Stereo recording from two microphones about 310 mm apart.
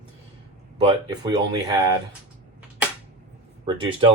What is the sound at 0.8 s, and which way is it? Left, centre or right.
Speech, centre.